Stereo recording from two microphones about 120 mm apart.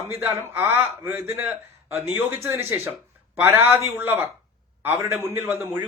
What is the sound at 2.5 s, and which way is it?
A man's voice, 20° right (ahead or behind).